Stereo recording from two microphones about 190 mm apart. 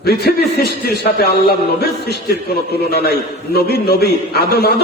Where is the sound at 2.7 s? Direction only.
55° left (ahead or behind).